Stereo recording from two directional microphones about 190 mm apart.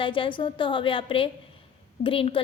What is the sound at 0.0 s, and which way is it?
A woman's voice, 25° left (ahead or behind).